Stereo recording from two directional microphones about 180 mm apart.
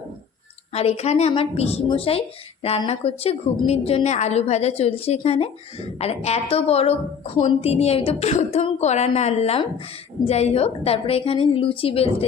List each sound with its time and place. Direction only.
0.7 s a woman's voice: 35° left (ahead or behind)